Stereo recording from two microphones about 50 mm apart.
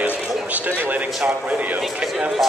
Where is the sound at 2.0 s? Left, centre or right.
Centre.